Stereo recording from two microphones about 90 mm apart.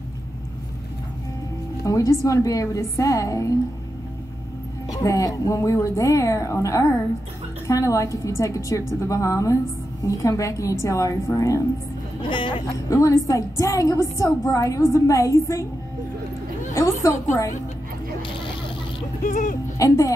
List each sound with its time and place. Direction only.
1.9 s a woman's voice: 40° left (ahead or behind)
4.9 s a woman's voice: 40° left (ahead or behind)
12.2 s speech: 65° left (ahead or behind)
12.9 s a woman's voice: 35° left (ahead or behind)
16.7 s a woman's voice: 35° left (ahead or behind)
19.8 s a woman's voice: 35° left (ahead or behind)